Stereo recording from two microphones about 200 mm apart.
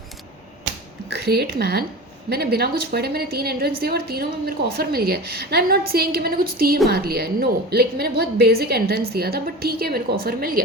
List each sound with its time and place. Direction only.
1.2 s a woman's voice: 55° right (ahead or behind)